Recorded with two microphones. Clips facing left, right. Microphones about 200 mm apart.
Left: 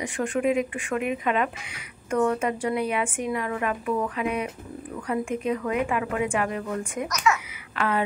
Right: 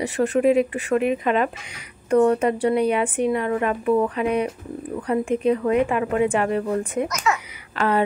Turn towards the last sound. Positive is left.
turn(degrees=-35)  # may be behind; listen again after turning